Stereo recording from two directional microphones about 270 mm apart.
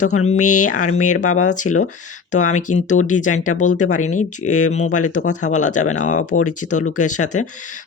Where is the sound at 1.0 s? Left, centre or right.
Left.